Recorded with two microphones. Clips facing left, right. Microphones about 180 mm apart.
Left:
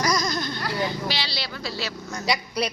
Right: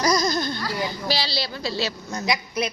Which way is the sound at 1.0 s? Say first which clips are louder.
Right 4 dB; 35° right (ahead or behind).